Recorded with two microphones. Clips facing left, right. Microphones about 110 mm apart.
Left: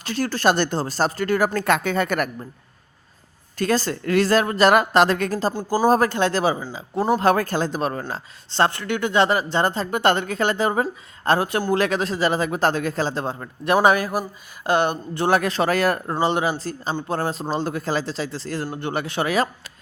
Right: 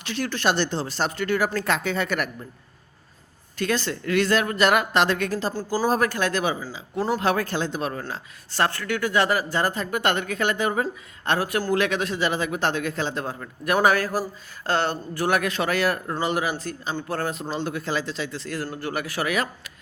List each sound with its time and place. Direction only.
0.0 s speech: 40° left (ahead or behind)
3.6 s a man's voice: 40° left (ahead or behind)
5.5 s a man's voice: 15° left (ahead or behind); by 8.2 s 40° left (ahead or behind)
8.4 s a man's voice: 25° left (ahead or behind)
15.2 s a man's voice: 30° left (ahead or behind)
16.2 s a man's voice: 30° left (ahead or behind)
17.1 s speech: 20° left (ahead or behind)
17.5 s a man's voice: 40° left (ahead or behind)